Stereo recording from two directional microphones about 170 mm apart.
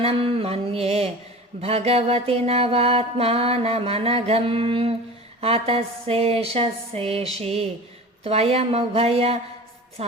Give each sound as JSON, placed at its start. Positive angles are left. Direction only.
{"t": 0.0, "sound": "mantra", "side_deg": -35}
{"t": 10.0, "sound": "music", "side_deg": -35}